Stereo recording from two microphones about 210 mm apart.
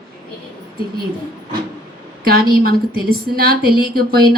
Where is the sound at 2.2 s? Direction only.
45° right (ahead or behind).